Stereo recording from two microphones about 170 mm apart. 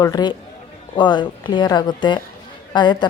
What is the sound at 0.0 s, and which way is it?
Speech, 25° left (ahead or behind).